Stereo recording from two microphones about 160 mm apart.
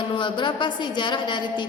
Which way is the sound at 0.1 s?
30° left (ahead or behind).